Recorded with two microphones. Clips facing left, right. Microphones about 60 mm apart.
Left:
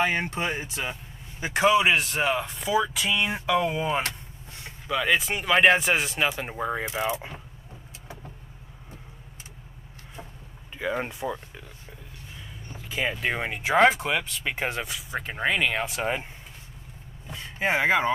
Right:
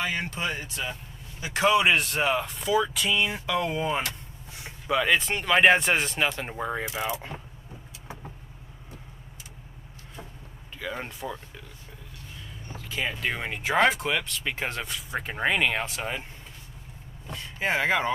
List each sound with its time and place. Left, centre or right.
0.0 s speech: left
1.5 s speech: centre
3.1 s speech: left
3.4 s speech: centre
10.8 s speech: left
12.7 s speech: centre
17.3 s speech: centre